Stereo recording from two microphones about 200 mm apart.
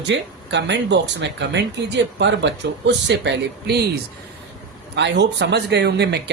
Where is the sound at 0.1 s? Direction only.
60° right (ahead or behind).